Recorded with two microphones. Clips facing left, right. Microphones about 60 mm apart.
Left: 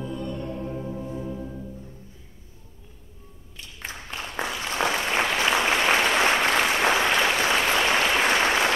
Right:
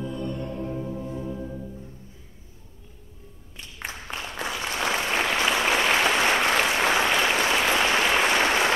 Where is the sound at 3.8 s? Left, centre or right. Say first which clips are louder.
Right 1 dB; centre.